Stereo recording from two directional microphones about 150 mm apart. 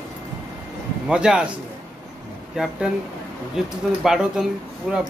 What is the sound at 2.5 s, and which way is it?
Speech, centre (ahead or behind).